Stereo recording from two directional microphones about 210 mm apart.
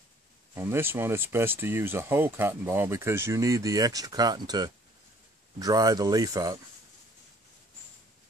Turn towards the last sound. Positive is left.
turn(degrees=-15)  # may be behind; listen again after turning